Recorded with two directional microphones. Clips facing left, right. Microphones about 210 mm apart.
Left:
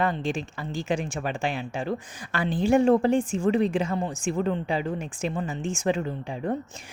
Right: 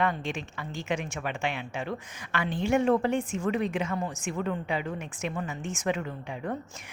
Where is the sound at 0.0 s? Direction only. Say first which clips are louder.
Left 3 dB; 35° left (ahead or behind).